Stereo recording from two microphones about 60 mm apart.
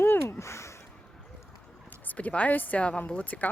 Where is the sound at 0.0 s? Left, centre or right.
Left.